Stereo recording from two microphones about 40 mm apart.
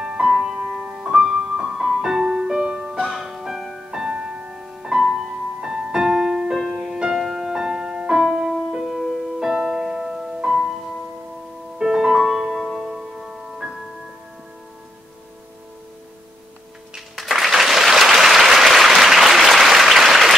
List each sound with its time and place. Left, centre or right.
0.0 s music: centre
0.8 s music: right
1.8 s music: centre
11.8 s music: centre
17.2 s applause: centre